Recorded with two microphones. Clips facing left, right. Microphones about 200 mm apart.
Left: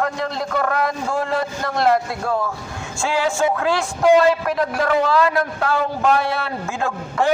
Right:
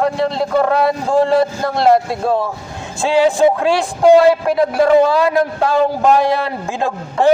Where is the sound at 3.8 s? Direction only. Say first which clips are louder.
Right 5 dB; 35° right (ahead or behind).